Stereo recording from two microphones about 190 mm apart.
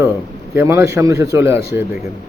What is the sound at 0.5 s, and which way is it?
Speech, 15° right (ahead or behind).